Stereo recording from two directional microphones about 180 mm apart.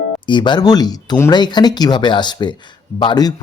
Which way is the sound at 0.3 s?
25° left (ahead or behind).